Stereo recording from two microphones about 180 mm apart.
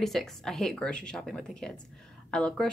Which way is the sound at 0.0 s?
Centre (ahead or behind).